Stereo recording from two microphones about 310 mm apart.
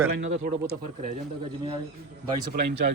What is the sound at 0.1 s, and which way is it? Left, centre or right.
Speech, right.